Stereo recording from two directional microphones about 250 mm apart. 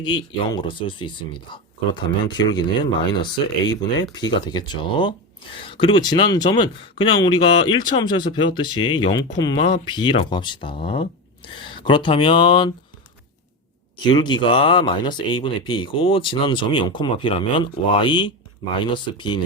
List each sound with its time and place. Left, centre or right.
0.0 s speech: centre
14.0 s speech: centre